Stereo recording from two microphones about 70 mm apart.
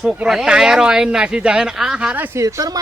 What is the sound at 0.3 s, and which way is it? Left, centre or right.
Speech, centre.